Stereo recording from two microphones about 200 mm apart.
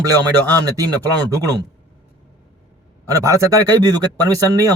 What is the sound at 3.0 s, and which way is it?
A man's voice, 15° right (ahead or behind).